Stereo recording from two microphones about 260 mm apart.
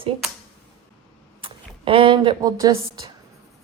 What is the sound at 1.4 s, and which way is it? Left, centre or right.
A woman's voice, centre.